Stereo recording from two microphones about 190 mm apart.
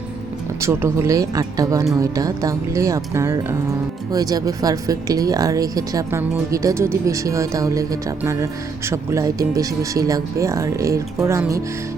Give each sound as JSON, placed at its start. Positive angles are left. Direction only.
{"t": 0.6, "sound": "speech", "side_deg": -15}